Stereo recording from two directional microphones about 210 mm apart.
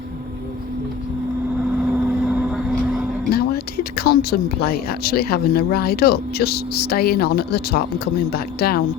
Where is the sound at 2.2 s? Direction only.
5° right (ahead or behind).